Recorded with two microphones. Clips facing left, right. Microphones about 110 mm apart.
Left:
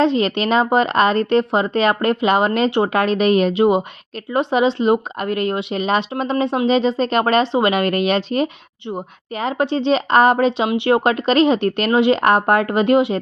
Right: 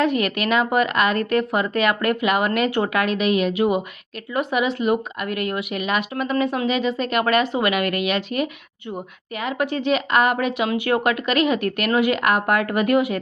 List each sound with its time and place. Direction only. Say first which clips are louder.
0.0 s speech: left 4 dB; 30° left (ahead or behind)